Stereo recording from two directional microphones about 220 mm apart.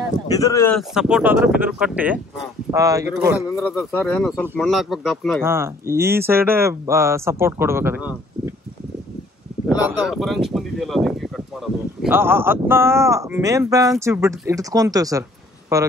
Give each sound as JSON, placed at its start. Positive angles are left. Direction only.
{"t": 0.3, "sound": "speech", "side_deg": 15}
{"t": 0.7, "sound": "speech", "side_deg": -5}
{"t": 3.5, "sound": "speech", "side_deg": 10}
{"t": 5.4, "sound": "speech", "side_deg": -10}
{"t": 9.8, "sound": "speech", "side_deg": 0}